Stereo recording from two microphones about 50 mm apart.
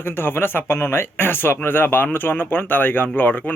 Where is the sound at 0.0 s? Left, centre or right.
Left.